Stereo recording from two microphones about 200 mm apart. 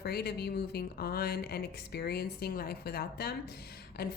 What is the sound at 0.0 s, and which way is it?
Speech, 50° left (ahead or behind).